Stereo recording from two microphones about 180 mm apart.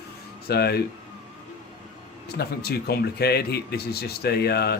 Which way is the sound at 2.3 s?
60° left (ahead or behind).